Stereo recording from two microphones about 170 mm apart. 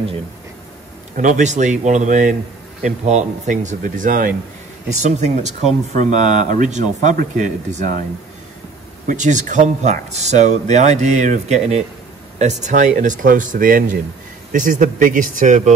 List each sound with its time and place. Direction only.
1.1 s speech: 45° right (ahead or behind)
9.0 s speech: 45° right (ahead or behind)